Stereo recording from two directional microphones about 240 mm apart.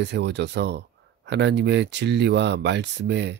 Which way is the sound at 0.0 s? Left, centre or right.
Right.